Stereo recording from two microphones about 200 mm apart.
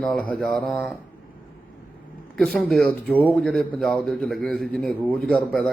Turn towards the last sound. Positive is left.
turn(degrees=0)  # may be behind; listen again after turning